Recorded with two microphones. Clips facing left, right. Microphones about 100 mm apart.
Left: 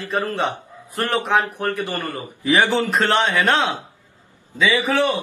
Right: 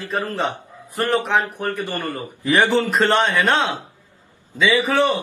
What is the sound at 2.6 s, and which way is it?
Speech, 15° left (ahead or behind).